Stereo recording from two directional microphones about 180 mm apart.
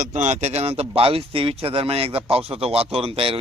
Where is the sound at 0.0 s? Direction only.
40° right (ahead or behind).